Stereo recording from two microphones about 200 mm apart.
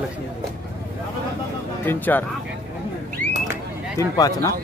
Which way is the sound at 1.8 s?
10° left (ahead or behind).